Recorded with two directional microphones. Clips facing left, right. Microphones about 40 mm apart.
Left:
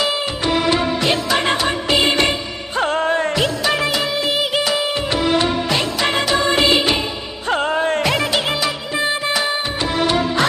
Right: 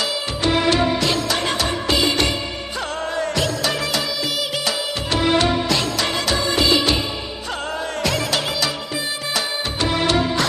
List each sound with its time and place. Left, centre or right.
0.4 s music of bollywood: centre
1.3 s music: left
3.7 s music of bollywood: left
4.9 s music of bollywood: left
6.3 s music of bollywood: left
7.4 s music: left
8.0 s music of bollywood: left
9.0 s music: left